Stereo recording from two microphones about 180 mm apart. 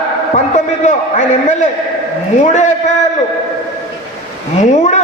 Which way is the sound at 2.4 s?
40° left (ahead or behind).